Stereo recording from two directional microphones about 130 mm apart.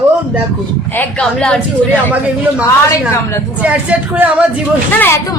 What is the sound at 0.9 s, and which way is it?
Speech, 5° left (ahead or behind).